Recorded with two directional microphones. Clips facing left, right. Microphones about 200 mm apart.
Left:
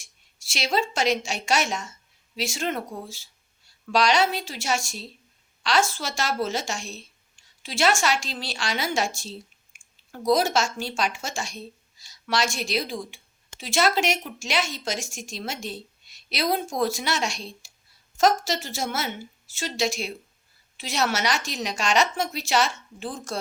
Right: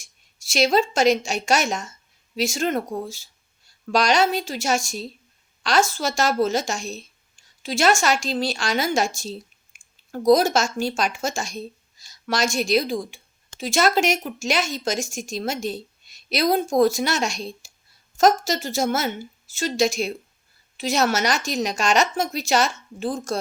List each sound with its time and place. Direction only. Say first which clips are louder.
0.0 s a woman's voice: right 1 dB; 45° right (ahead or behind)